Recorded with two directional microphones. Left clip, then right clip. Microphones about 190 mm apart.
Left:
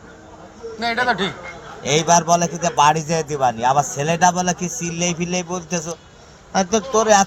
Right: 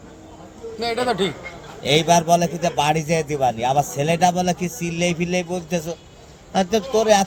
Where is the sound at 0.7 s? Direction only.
50° right (ahead or behind).